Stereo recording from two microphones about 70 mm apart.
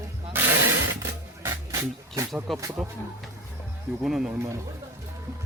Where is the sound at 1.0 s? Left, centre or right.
Right.